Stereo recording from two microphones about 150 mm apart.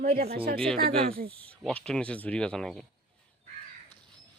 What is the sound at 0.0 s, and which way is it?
Speech, 80° right.